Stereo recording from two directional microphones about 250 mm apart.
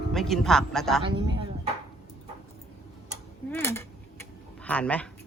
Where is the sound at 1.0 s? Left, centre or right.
Centre.